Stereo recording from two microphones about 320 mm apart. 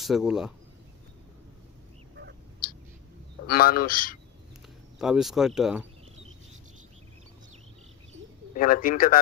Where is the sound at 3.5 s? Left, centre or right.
Left.